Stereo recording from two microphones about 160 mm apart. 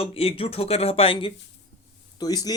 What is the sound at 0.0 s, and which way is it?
Speech, 35° left (ahead or behind).